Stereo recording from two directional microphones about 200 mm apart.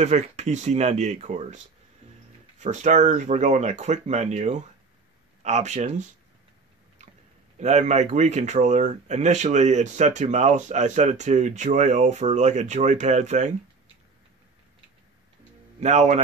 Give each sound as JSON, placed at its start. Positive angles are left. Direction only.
{"t": 0.0, "sound": "speech", "side_deg": -35}
{"t": 2.6, "sound": "speech", "side_deg": -35}
{"t": 7.5, "sound": "speech", "side_deg": -35}
{"t": 15.8, "sound": "speech", "side_deg": -35}